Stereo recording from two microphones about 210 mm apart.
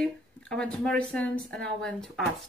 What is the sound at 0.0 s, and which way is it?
Speech, 5° left (ahead or behind).